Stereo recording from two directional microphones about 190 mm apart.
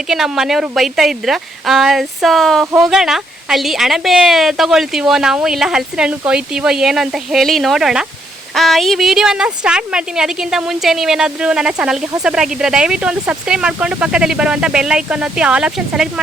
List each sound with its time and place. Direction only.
0.1 s a woman's voice: centre (ahead or behind)